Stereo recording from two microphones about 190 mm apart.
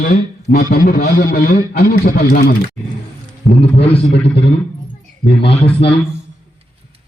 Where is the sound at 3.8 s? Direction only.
30° left (ahead or behind).